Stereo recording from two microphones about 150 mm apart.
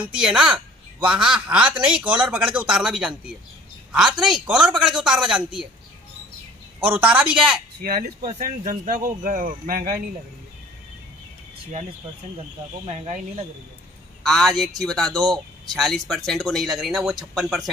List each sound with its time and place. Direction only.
0.0 s a woman's voice: 5° right (ahead or behind)
6.8 s a woman's voice: 10° right (ahead or behind)
7.8 s speech: 80° right
8.4 s speech: 60° right (ahead or behind)
12.8 s speech: 45° right (ahead or behind)
14.2 s a man's voice: centre (ahead or behind)